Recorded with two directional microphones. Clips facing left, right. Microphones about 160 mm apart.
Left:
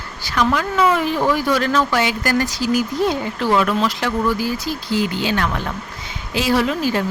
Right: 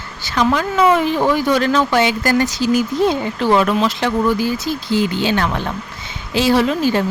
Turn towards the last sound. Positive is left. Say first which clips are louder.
# right 3 dB
turn(degrees=-25)  # may be behind; listen again after turning